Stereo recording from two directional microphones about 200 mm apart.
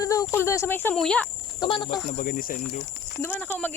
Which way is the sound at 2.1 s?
40° left (ahead or behind).